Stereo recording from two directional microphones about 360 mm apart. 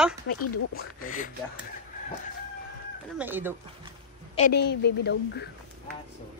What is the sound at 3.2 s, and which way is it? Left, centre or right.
Speech, centre.